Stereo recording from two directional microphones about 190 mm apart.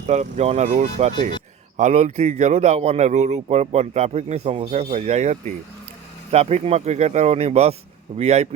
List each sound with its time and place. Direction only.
0.1 s speech: 35° right (ahead or behind)